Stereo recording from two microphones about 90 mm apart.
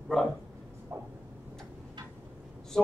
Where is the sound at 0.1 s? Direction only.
5° left (ahead or behind).